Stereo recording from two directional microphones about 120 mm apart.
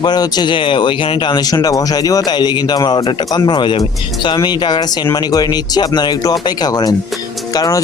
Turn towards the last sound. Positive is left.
turn(degrees=30)  # may be behind; listen again after turning